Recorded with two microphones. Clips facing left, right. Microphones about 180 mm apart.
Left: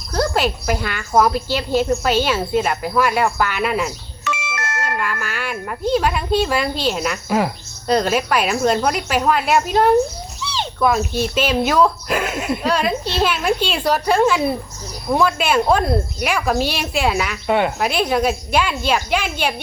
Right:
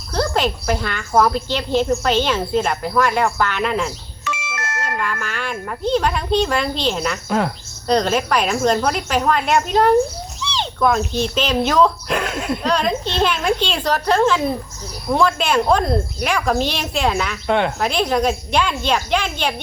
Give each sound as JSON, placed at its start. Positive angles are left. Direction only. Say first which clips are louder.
{"t": 0.1, "sound": "speech", "louder": "left 1 dB", "side_deg": 10}
{"t": 4.2, "sound": "doorbell", "louder": "left 2 dB", "side_deg": 70}
{"t": 4.9, "sound": "speech", "louder": "even", "side_deg": 5}